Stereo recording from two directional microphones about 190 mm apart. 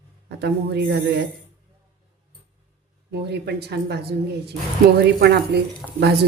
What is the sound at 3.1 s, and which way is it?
A woman's voice, 60° right (ahead or behind).